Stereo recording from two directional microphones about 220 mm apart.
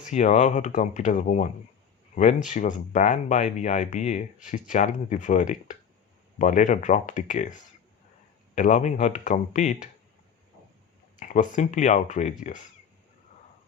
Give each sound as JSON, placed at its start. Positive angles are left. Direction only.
{"t": 0.0, "sound": "speech", "side_deg": 35}
{"t": 11.2, "sound": "speech", "side_deg": 35}